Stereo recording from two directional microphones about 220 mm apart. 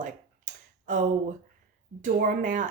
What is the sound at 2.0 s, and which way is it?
Speech, 35° right (ahead or behind).